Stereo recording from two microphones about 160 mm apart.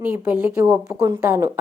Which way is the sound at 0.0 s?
10° right (ahead or behind).